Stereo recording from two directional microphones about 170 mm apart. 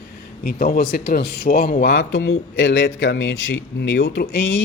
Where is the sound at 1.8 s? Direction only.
90° left.